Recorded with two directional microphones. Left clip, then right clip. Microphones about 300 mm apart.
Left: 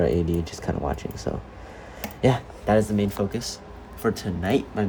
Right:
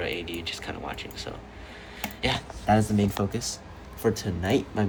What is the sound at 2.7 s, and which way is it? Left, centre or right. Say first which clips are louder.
Speech: left 2 dB; centre.